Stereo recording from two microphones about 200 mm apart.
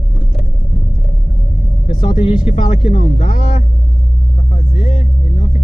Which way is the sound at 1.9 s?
25° left (ahead or behind).